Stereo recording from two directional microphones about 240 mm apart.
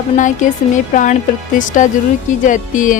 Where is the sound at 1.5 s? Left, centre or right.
Left.